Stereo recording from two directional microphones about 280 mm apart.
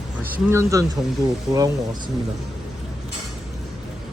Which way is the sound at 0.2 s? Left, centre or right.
Centre.